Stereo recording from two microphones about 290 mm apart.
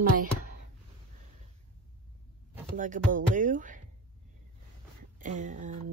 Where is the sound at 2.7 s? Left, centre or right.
Right.